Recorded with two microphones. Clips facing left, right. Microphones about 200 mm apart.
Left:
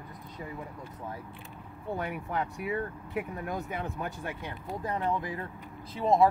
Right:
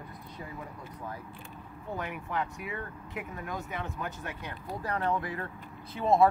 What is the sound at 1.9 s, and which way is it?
Speech, 35° left (ahead or behind).